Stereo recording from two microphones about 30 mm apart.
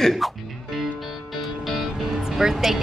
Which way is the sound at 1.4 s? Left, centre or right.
Centre.